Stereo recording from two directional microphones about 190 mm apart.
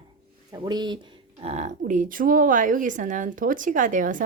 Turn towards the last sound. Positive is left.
turn(degrees=-45)  # may be behind; listen again after turning